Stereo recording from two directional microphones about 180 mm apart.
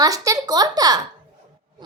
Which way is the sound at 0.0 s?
20° right (ahead or behind).